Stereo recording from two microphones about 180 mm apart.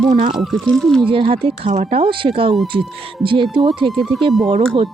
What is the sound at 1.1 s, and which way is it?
Speech, 30° right (ahead or behind).